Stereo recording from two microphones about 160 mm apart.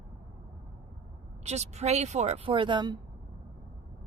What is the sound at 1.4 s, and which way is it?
Speech, 45° right (ahead or behind).